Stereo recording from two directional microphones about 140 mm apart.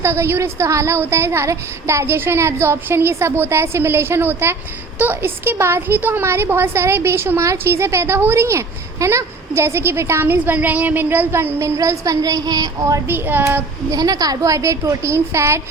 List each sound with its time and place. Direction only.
0.0 s a woman's voice: 15° right (ahead or behind)
13.1 s a woman's voice: 15° right (ahead or behind)
13.9 s a woman's voice: 25° right (ahead or behind)